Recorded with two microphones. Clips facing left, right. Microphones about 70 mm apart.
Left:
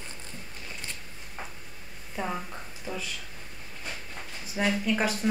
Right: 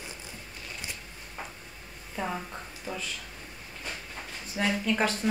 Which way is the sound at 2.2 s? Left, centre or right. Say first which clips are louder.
Even; centre.